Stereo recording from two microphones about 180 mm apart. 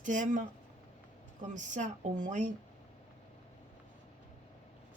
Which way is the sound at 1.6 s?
45° right (ahead or behind).